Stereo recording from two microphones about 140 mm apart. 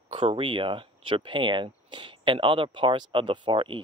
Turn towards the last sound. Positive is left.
turn(degrees=-35)  # may be behind; listen again after turning